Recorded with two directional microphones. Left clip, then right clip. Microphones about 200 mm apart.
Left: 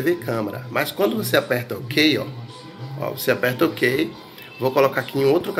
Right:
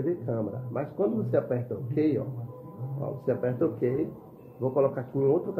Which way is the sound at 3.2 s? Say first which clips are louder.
Left 8 dB; 25° left (ahead or behind).